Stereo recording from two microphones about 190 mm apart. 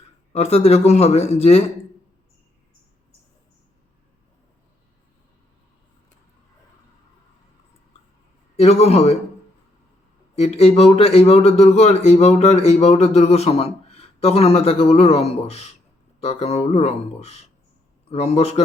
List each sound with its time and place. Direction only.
0.3 s a man's voice: 30° left (ahead or behind)
8.5 s a man's voice: 35° left (ahead or behind)
10.3 s a man's voice: 30° left (ahead or behind)